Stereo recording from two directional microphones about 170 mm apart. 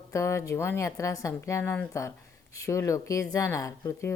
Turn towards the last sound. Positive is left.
turn(degrees=20)  # may be behind; listen again after turning